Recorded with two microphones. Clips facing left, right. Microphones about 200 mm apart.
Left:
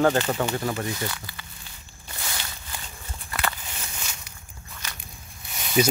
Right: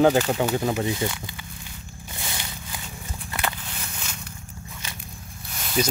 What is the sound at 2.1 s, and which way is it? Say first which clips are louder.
Walk: right 1 dB; 20° right (ahead or behind).